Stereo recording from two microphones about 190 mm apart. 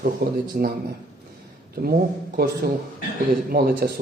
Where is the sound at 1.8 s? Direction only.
50° right (ahead or behind).